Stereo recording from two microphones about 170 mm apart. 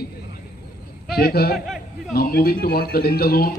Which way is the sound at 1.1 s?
70° left (ahead or behind).